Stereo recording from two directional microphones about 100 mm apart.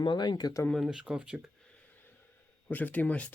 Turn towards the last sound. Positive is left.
turn(degrees=15)  # may be behind; listen again after turning